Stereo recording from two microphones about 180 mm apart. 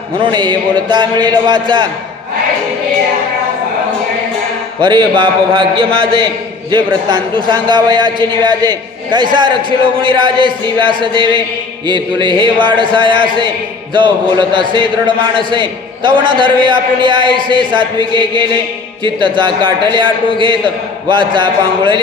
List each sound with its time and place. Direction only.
0.2 s a man's voice: 25° right (ahead or behind)
4.8 s a man's voice: 25° right (ahead or behind)
21.1 s a man's voice: 25° right (ahead or behind)